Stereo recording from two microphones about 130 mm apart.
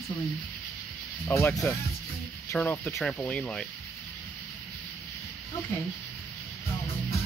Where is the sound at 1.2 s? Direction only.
15° left (ahead or behind).